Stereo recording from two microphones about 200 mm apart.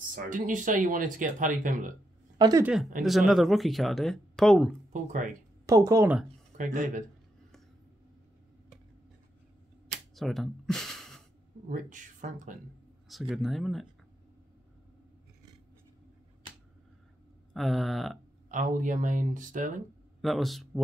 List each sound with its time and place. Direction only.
0.1 s speech: 40° right (ahead or behind)
2.3 s a woman's voice: 20° right (ahead or behind)
2.6 s speech: 5° right (ahead or behind)
4.9 s speech: 40° right (ahead or behind)
5.7 s speech: 15° right (ahead or behind)
6.6 s speech: 40° right (ahead or behind)
10.1 s gasp: centre (ahead or behind)
11.7 s speech: 40° right (ahead or behind)
13.3 s speech: centre (ahead or behind)
17.6 s speech: centre (ahead or behind)
18.5 s speech: 40° right (ahead or behind)
20.2 s speech: centre (ahead or behind)